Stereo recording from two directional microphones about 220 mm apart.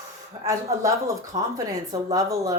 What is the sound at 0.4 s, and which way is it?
Speech, 15° right (ahead or behind).